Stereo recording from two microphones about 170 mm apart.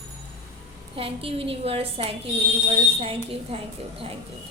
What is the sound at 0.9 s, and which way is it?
A woman's voice, 35° right (ahead or behind).